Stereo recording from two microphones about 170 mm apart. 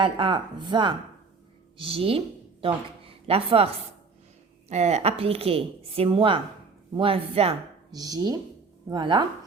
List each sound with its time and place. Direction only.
0.0 s a woman's voice: 30° right (ahead or behind)
7.9 s speech: 20° right (ahead or behind)